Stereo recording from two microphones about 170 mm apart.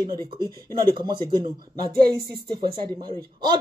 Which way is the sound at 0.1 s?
30° right (ahead or behind).